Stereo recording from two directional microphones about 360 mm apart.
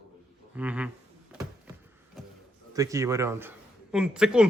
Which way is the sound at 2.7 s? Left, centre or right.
Centre.